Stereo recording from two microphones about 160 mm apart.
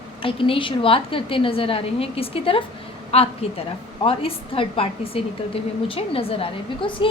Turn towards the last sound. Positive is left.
turn(degrees=35)  # may be behind; listen again after turning